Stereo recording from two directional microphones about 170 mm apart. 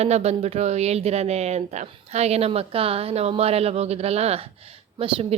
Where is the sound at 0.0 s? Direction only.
40° right (ahead or behind).